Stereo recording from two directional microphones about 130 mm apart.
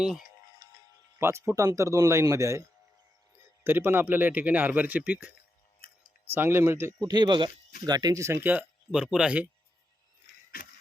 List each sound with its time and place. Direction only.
1.2 s speech: 20° right (ahead or behind)
6.3 s speech: 20° right (ahead or behind)
7.1 s speech: 35° right (ahead or behind)
8.4 s speech: 5° right (ahead or behind)